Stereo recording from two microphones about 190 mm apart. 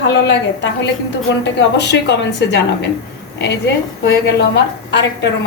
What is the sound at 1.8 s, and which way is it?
Speech, 65° left (ahead or behind).